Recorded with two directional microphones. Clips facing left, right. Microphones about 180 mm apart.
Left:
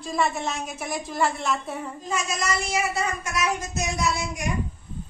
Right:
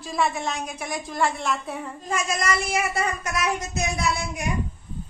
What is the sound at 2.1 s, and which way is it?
A woman's voice, 55° right (ahead or behind).